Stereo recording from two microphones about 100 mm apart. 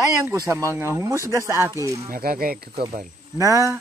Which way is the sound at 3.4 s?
30° right (ahead or behind).